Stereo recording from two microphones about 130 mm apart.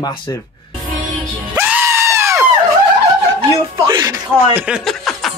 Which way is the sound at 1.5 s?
15° right (ahead or behind).